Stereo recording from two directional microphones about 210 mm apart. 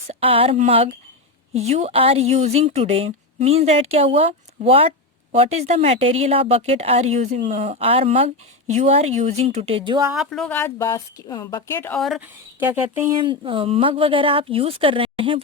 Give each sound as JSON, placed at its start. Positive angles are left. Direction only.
{"t": 0.1, "sound": "a woman's voice", "side_deg": -25}
{"t": 10.1, "sound": "speech", "side_deg": 0}
{"t": 12.6, "sound": "speech", "side_deg": -10}
{"t": 13.4, "sound": "a woman's voice", "side_deg": -25}